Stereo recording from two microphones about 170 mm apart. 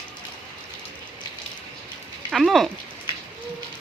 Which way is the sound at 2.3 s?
Centre (ahead or behind).